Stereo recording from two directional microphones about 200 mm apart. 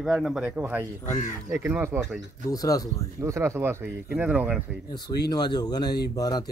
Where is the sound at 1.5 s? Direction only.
10° right (ahead or behind).